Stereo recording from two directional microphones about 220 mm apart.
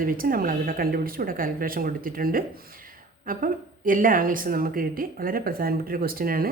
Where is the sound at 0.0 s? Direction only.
40° right (ahead or behind).